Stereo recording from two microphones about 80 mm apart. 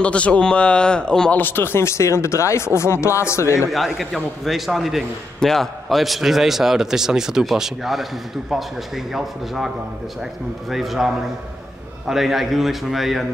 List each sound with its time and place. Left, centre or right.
0.0 s speech: centre
1.3 s speech: left
3.7 s a man's voice: centre
10.7 s a man's voice: centre